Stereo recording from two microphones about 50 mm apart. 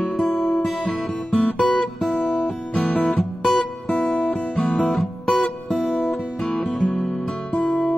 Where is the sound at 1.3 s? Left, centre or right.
Centre.